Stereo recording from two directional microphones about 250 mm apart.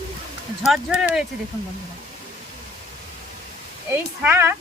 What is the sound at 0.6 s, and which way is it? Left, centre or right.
Speech, centre.